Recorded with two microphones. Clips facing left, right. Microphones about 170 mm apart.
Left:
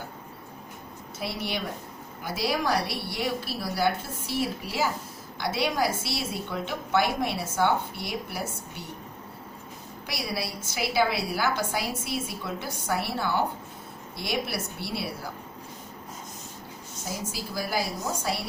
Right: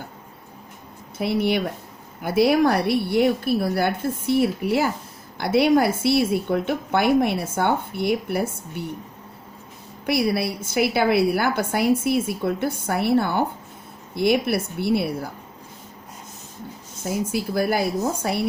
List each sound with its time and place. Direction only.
1.2 s a woman's voice: 55° right (ahead or behind)
10.1 s a woman's voice: 60° right (ahead or behind)
17.1 s a woman's voice: 60° right (ahead or behind)